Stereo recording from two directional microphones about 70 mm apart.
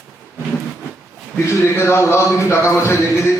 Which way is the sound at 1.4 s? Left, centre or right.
Left.